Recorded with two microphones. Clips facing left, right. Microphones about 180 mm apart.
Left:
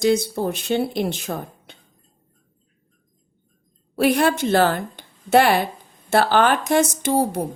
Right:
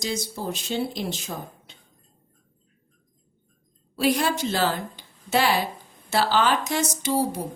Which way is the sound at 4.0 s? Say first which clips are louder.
Left 5 dB; 60° left (ahead or behind).